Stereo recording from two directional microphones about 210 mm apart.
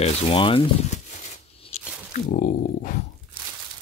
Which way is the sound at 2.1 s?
40° left (ahead or behind).